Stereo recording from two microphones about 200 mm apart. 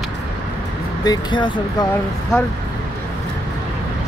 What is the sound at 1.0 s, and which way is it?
Speech, 20° left (ahead or behind).